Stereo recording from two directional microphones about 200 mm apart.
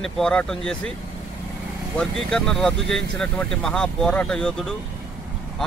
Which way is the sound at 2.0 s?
5° left (ahead or behind).